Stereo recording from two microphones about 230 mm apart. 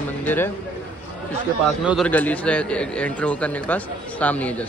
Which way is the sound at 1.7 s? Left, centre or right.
Centre.